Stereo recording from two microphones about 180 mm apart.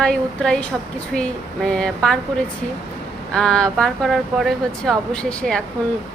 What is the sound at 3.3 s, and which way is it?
Speech, 5° left (ahead or behind).